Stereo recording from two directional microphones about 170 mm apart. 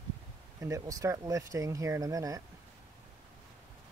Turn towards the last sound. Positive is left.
turn(degrees=-20)  # may be behind; listen again after turning